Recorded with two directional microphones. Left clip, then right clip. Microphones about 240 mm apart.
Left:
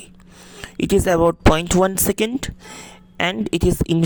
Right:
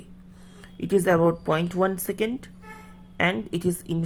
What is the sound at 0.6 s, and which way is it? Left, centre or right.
Speech, left.